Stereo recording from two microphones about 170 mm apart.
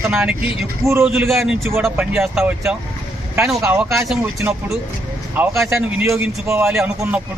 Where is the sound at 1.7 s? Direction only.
15° right (ahead or behind).